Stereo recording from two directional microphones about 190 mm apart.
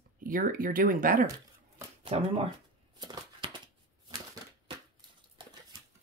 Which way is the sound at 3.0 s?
25° right (ahead or behind).